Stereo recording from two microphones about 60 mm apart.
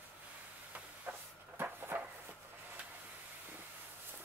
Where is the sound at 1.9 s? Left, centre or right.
Right.